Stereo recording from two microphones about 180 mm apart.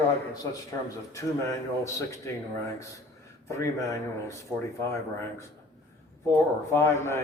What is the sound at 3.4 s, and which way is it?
Speech, 15° left (ahead or behind).